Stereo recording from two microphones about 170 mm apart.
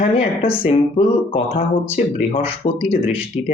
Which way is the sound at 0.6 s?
35° left (ahead or behind).